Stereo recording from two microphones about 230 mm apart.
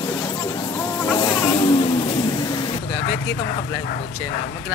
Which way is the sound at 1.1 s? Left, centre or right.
Centre.